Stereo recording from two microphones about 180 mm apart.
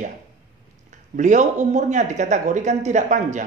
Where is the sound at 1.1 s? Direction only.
45° right (ahead or behind).